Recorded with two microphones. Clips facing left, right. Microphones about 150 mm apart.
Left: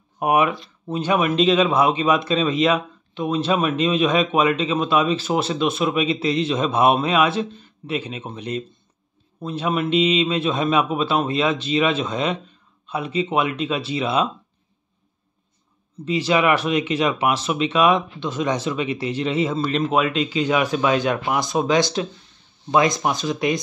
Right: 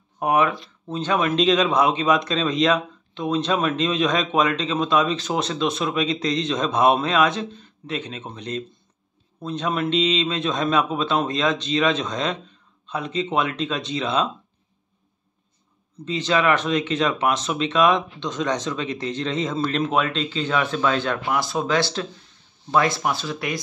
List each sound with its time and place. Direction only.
0.2 s speech: 10° left (ahead or behind)
16.1 s speech: 10° left (ahead or behind)